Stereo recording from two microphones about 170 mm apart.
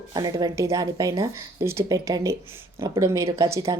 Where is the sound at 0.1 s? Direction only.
20° right (ahead or behind).